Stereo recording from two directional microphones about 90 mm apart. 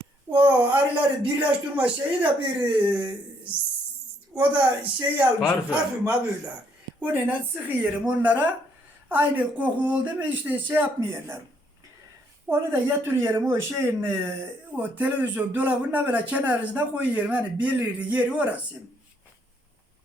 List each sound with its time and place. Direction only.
0.3 s a sound: 20° right (ahead or behind)
1.2 s speech: 15° right (ahead or behind)
4.4 s speech: 15° right (ahead or behind)
12.5 s speech: 25° right (ahead or behind)